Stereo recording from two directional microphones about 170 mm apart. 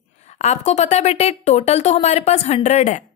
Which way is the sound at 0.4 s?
40° left (ahead or behind).